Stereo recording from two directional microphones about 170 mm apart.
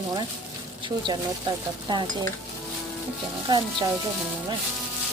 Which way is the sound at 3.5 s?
25° right (ahead or behind).